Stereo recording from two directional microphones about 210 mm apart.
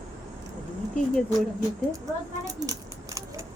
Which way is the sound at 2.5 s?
15° right (ahead or behind).